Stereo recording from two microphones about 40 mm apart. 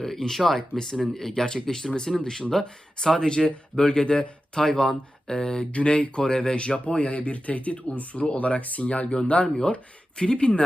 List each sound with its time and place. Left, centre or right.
0.0 s speech: centre; by 10.6 s left